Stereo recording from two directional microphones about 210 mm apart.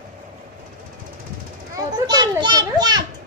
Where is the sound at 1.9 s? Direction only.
20° right (ahead or behind).